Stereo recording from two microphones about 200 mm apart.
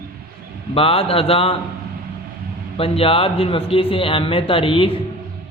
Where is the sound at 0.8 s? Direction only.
30° left (ahead or behind).